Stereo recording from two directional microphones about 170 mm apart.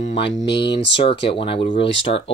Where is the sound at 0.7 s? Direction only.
90° left.